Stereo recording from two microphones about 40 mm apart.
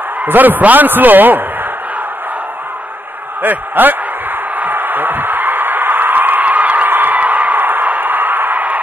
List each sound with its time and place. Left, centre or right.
0.2 s a man's voice: right
3.4 s a man's voice: right
4.6 s a sound: right